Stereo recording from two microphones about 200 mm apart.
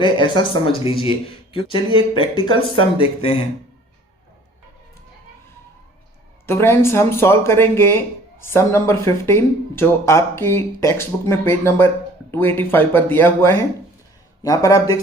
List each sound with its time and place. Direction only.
0.0 s speech: 25° left (ahead or behind)
6.4 s speech: 10° left (ahead or behind)